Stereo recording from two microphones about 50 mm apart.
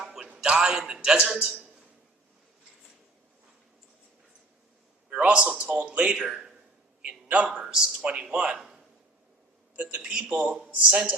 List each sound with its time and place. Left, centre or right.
0.0 s music: centre
0.3 s a man's voice: centre
1.3 s speech: right
5.0 s a man's voice: centre
7.0 s a man's voice: right
7.6 s a man's voice: centre
8.5 s a sound: centre
9.7 s speech: centre